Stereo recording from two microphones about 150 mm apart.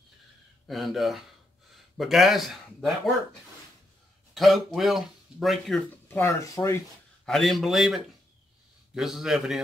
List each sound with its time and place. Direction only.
0.7 s speech: centre (ahead or behind)
4.3 s speech: centre (ahead or behind)
6.0 s speech: 15° left (ahead or behind)
7.2 s speech: centre (ahead or behind)